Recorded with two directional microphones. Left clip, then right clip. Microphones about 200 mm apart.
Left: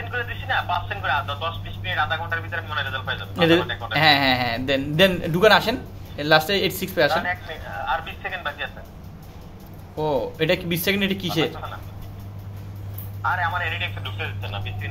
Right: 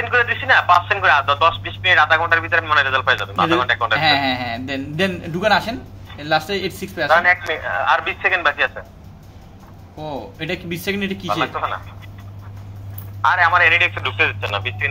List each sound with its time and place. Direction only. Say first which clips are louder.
0.0 s speech: right 12 dB; 45° right (ahead or behind)
3.9 s a man's voice: left 3 dB; 15° left (ahead or behind)
7.2 s speech: right 10 dB; 40° right (ahead or behind)
9.9 s a man's voice: left 6 dB; 15° left (ahead or behind)
11.5 s speech: right 12 dB; 45° right (ahead or behind)
13.2 s speech: right 10 dB; 45° right (ahead or behind)